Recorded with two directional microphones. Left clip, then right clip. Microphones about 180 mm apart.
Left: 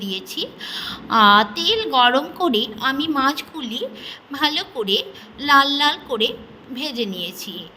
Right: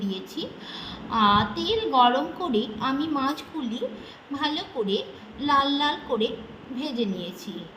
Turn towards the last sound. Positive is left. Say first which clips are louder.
# left 5 dB
turn(degrees=45)  # may be behind; listen again after turning